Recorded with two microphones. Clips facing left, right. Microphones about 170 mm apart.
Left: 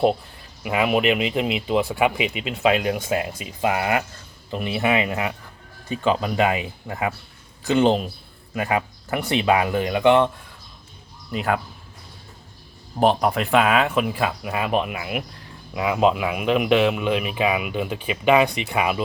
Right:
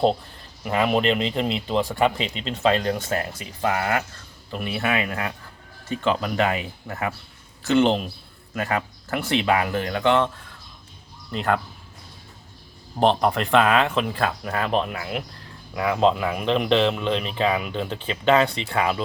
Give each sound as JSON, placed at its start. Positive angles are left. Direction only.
{"t": 0.6, "sound": "speech", "side_deg": 10}
{"t": 13.0, "sound": "speech", "side_deg": 5}